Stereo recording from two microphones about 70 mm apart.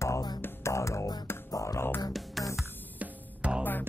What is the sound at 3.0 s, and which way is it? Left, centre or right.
Music, centre.